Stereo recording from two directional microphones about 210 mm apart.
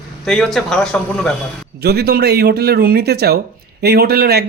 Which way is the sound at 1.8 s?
50° right (ahead or behind).